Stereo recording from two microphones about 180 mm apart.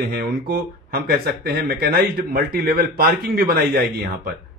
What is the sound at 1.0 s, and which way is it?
A man's voice, 60° right (ahead or behind).